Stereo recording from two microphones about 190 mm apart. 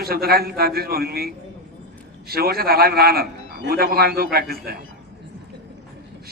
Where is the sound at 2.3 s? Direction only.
55° right (ahead or behind).